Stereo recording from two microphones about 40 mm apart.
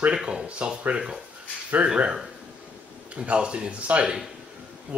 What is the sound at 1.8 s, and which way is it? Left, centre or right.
Speech, right.